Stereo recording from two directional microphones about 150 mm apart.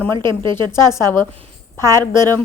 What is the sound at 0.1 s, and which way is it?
Speech, 30° right (ahead or behind).